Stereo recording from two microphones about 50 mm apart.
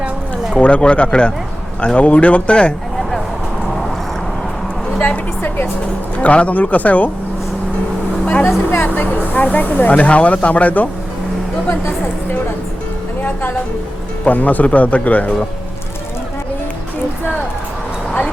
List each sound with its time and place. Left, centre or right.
0.5 s speech: left
4.9 s a woman's voice: left
8.2 s speech: left
8.4 s a woman's voice: left
9.0 s speech: left
11.7 s a woman's voice: left